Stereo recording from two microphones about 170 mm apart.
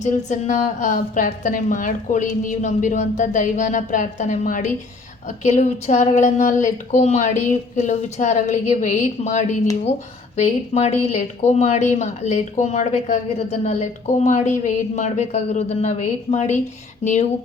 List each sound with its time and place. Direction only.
0.3 s speech: 45° left (ahead or behind)
17.0 s music: 45° left (ahead or behind)